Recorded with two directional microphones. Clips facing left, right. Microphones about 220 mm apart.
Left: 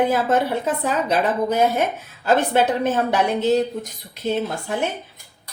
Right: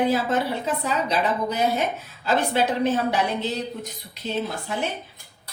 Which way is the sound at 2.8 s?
50° left (ahead or behind).